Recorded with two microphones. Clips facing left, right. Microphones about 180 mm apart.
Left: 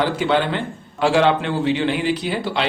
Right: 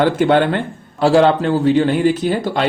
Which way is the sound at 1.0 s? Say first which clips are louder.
Right 4 dB; 40° right (ahead or behind).